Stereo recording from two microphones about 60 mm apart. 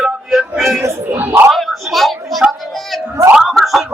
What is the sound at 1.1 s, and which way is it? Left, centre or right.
Speech, right.